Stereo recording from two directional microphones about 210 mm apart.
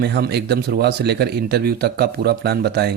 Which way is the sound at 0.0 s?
50° right (ahead or behind).